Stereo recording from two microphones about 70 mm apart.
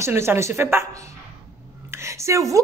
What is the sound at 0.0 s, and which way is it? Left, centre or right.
Speech, right.